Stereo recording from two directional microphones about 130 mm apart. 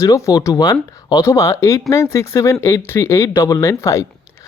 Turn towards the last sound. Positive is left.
turn(degrees=20)  # may be behind; listen again after turning